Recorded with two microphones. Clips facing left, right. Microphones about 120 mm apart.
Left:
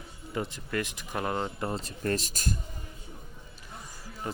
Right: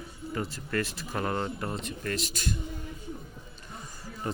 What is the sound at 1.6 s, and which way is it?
Speech, 30° left (ahead or behind).